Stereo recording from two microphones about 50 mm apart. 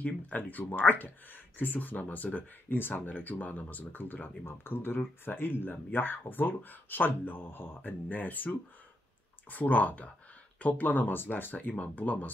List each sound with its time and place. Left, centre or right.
0.0 s speech: left